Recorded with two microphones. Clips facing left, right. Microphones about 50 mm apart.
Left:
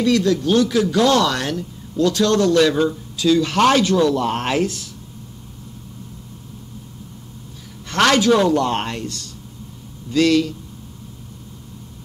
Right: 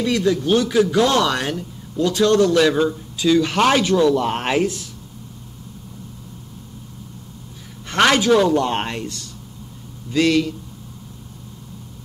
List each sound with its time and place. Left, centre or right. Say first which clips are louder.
0.0 s speech: left 2 dB; centre
7.9 s speech: even; centre
8.3 s speech: even; centre
8.5 s speech: even; centre